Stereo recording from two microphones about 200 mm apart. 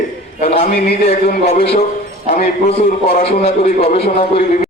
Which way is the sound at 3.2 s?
30° left (ahead or behind).